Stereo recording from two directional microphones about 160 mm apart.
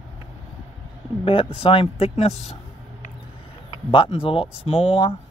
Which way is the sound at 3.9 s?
35° left (ahead or behind).